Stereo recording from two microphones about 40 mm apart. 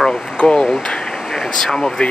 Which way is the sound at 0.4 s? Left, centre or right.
Left.